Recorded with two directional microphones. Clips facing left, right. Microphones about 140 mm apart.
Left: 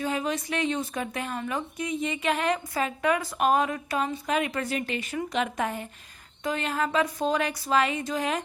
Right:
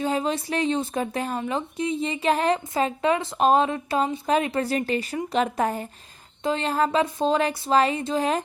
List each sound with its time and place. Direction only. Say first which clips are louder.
0.0 s speech: right 4 dB; 30° right (ahead or behind)